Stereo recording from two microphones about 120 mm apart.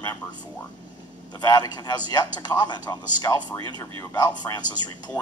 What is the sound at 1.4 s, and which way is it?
Speech, 35° left (ahead or behind).